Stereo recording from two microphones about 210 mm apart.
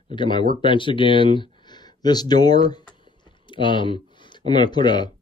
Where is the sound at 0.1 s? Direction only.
20° left (ahead or behind).